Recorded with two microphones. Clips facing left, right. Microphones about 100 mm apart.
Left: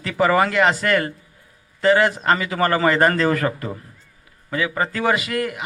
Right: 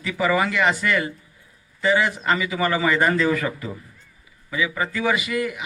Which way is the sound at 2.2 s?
45° left (ahead or behind).